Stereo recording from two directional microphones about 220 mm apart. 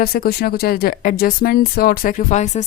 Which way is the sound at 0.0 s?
45° left (ahead or behind).